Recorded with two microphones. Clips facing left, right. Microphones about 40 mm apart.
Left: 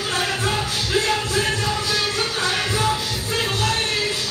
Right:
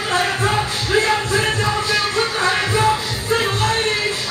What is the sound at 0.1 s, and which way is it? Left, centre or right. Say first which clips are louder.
Music: right 5 dB; right.